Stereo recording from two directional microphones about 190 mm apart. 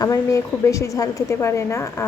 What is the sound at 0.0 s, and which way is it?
Speech, 15° left (ahead or behind).